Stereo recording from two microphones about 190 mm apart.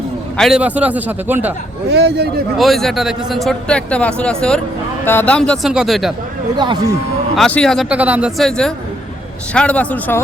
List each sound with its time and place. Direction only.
0.3 s a man's voice: centre (ahead or behind)
1.9 s a man's voice: 60° right (ahead or behind)
2.6 s a man's voice: centre (ahead or behind)
7.3 s a man's voice: 5° left (ahead or behind)